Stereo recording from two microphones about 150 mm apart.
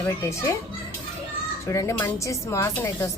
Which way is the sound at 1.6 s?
20° left (ahead or behind).